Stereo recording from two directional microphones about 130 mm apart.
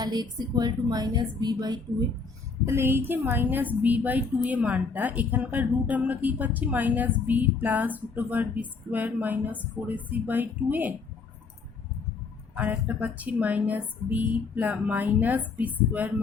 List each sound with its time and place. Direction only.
0.0 s a woman's voice: 30° right (ahead or behind)
2.6 s a woman's voice: 20° right (ahead or behind)
12.5 s a woman's voice: 15° right (ahead or behind)